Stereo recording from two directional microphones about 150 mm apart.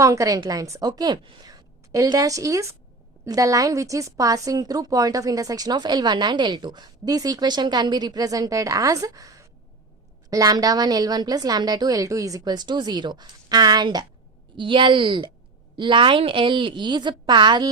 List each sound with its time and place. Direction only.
0.0 s a woman's voice: 20° right (ahead or behind)